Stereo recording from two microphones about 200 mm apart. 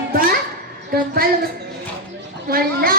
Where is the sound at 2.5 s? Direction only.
45° right (ahead or behind).